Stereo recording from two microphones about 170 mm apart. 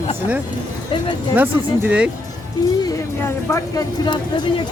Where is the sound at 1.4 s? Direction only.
10° right (ahead or behind).